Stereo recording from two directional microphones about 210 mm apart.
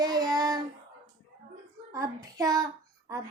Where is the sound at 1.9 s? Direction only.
15° right (ahead or behind).